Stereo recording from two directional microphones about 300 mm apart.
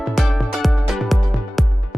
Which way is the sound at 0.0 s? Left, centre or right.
Centre.